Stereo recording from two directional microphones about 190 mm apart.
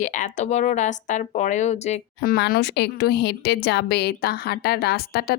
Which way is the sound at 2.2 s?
55° left (ahead or behind).